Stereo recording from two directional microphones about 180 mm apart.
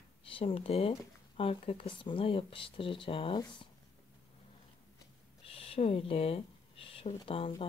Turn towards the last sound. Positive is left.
turn(degrees=30)  # may be behind; listen again after turning